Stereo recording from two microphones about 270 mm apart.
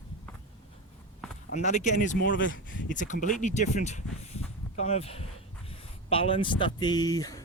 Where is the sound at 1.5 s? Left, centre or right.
Left.